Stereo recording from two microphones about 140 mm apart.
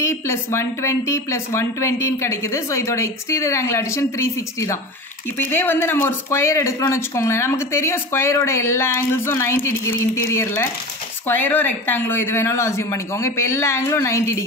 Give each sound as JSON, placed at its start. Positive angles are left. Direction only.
{"t": 0.0, "sound": "speech", "side_deg": 20}
{"t": 5.5, "sound": "speech", "side_deg": 15}